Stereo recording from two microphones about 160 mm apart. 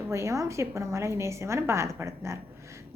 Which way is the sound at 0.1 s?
20° right (ahead or behind).